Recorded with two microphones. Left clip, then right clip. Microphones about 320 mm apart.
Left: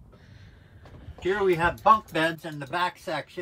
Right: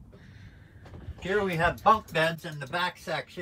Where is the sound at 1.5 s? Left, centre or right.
Left.